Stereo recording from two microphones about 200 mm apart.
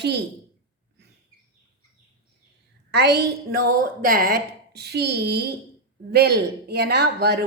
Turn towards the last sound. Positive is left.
turn(degrees=-55)  # may be behind; listen again after turning